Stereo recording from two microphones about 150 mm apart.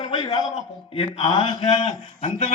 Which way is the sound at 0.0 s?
40° left (ahead or behind).